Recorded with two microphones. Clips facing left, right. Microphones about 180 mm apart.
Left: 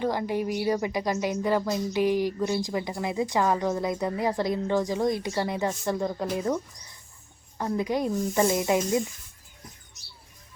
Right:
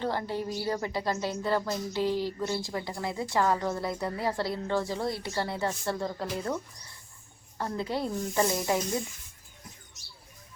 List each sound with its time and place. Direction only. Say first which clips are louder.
0.0 s speech: left 4 dB; 15° left (ahead or behind)